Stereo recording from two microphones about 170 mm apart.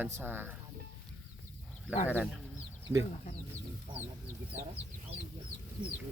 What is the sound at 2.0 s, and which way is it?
Speech, 10° right (ahead or behind).